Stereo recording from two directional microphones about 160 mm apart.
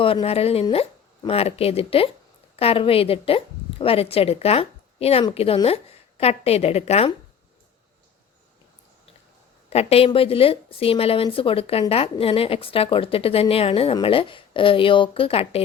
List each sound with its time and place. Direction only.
0.0 s a woman's voice: 35° left (ahead or behind)
9.6 s a woman's voice: 40° left (ahead or behind)